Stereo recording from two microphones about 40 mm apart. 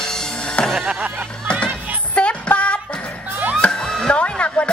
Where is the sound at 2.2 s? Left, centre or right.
Left.